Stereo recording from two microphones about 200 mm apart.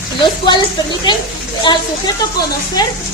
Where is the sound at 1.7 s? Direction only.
20° left (ahead or behind).